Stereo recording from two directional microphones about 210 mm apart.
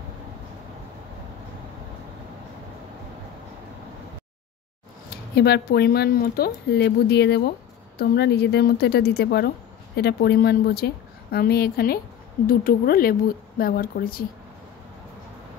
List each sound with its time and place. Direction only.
5.3 s a woman's voice: 50° left (ahead or behind)